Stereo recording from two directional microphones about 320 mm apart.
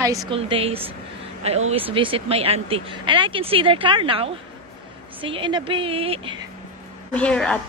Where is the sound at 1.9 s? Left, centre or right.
Centre.